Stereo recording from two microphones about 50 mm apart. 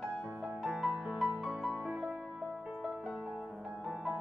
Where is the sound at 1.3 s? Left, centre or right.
Centre.